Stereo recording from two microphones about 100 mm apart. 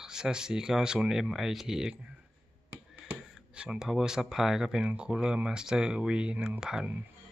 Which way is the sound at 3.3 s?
5° right (ahead or behind).